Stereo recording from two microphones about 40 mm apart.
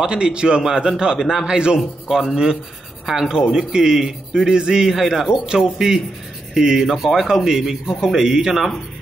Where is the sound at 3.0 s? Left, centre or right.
Centre.